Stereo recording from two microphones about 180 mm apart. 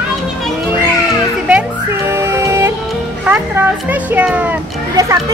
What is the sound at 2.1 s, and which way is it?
Music, 15° right (ahead or behind).